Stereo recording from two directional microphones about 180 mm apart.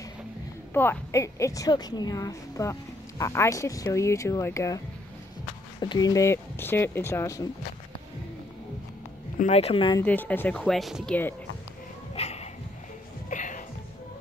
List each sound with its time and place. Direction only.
0.7 s a woman's voice: 15° left (ahead or behind)
9.4 s speech: 35° left (ahead or behind)
9.9 s a woman's voice: 10° left (ahead or behind)
12.2 s dog: 35° left (ahead or behind)
13.3 s music: 45° left (ahead or behind)